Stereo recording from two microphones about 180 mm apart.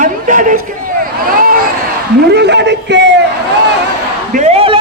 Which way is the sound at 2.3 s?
70° right (ahead or behind).